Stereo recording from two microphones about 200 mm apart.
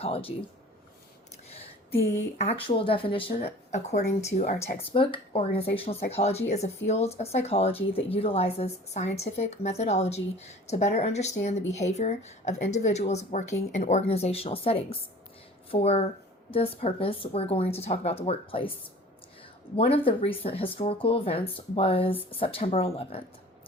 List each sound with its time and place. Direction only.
0.0 s speech: 30° left (ahead or behind)
2.4 s speech: 25° left (ahead or behind)
19.7 s speech: 30° left (ahead or behind)